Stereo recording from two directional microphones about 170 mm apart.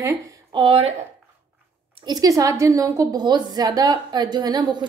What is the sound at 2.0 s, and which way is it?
A woman's voice, 20° right (ahead or behind).